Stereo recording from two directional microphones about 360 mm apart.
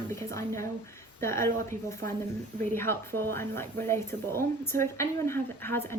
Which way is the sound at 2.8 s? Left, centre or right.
Centre.